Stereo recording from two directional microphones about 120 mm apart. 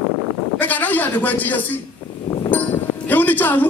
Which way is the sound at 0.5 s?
15° left (ahead or behind).